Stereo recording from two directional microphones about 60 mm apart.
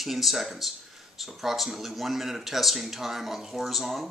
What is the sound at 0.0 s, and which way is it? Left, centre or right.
Speech, centre.